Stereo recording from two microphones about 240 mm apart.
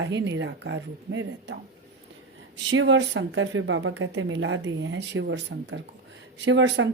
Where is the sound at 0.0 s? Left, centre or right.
Right.